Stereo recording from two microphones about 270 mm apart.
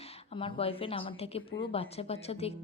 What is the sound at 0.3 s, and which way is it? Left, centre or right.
A woman's voice, centre.